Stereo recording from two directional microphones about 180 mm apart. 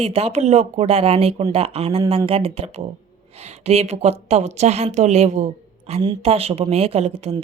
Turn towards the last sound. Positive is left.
turn(degrees=-35)  # may be behind; listen again after turning